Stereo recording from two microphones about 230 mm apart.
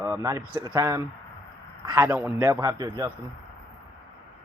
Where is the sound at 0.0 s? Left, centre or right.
Centre.